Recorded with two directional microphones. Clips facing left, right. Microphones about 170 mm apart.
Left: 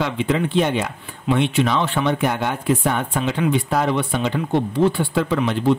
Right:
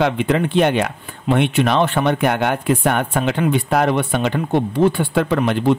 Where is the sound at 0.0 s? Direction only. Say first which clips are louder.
Right 3 dB; 60° right (ahead or behind).